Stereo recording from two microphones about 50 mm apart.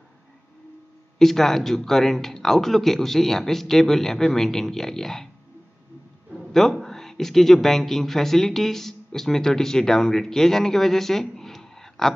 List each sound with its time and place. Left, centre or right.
1.1 s a man's voice: centre
6.5 s speech: centre